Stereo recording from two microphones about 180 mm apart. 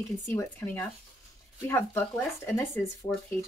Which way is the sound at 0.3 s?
15° left (ahead or behind).